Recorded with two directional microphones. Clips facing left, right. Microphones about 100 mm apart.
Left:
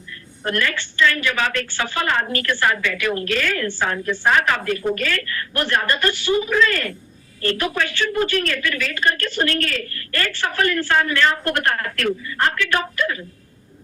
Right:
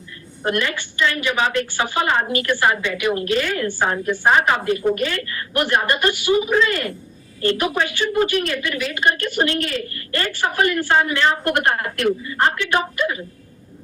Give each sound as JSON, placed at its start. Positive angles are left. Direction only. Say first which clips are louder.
{"t": 0.4, "sound": "a woman's voice", "louder": "right 1 dB", "side_deg": -20}